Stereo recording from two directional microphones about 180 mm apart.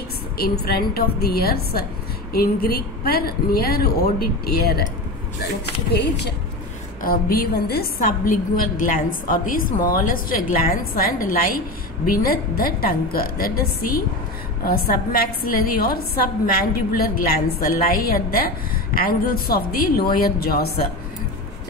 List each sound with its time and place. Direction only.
0.4 s a woman's voice: 60° left (ahead or behind)
5.9 s speech: 70° left (ahead or behind)
7.0 s a woman's voice: 55° left (ahead or behind)